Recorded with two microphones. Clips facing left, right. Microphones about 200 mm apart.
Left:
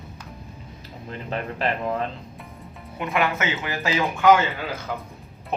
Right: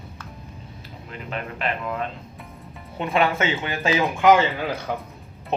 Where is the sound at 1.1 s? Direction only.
35° left (ahead or behind).